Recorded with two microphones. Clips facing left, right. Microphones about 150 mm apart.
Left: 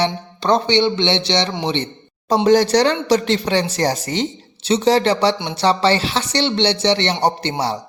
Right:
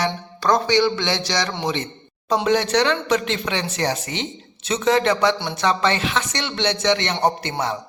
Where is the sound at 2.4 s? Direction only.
40° left (ahead or behind).